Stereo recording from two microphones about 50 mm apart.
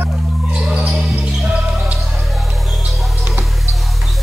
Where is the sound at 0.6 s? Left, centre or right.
Centre.